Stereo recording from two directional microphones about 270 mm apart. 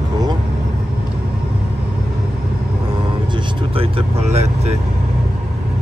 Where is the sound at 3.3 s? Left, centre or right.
Centre.